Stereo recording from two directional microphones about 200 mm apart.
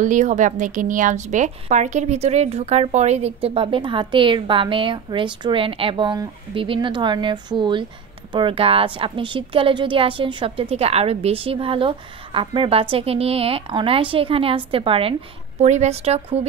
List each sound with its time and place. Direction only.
0.0 s a woman's voice: 40° right (ahead or behind)